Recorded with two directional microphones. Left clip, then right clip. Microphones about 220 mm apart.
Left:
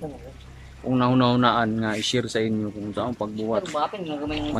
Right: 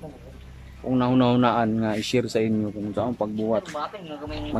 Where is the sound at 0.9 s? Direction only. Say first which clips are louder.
Even; centre (ahead or behind).